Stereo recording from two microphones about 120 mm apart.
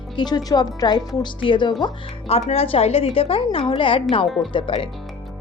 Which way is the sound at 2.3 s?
55° left (ahead or behind).